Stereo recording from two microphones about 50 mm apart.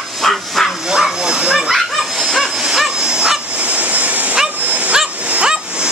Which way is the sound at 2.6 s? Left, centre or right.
Centre.